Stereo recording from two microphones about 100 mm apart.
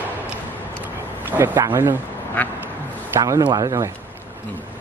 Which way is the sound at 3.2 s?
35° right (ahead or behind).